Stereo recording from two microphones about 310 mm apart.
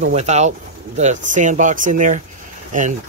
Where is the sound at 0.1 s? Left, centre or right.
Right.